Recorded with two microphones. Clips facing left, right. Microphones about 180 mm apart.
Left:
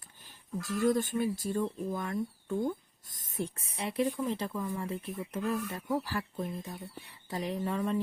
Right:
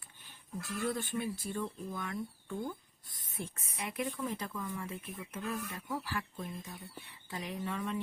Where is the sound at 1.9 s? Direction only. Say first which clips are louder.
Left 5 dB; 40° left (ahead or behind).